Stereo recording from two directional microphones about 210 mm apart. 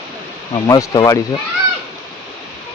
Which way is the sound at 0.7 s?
15° left (ahead or behind).